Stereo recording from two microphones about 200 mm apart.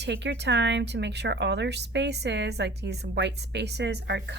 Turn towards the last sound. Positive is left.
turn(degrees=-60)  # may be behind; listen again after turning